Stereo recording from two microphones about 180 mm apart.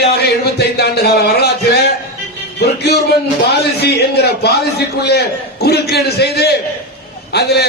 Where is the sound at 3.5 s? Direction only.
65° left (ahead or behind).